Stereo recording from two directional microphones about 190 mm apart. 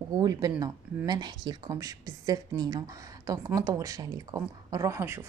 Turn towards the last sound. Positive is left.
turn(degrees=-10)  # may be behind; listen again after turning